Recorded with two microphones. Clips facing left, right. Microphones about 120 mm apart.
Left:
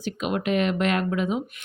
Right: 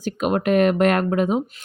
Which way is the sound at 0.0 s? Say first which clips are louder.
Right 5 dB; 45° right (ahead or behind).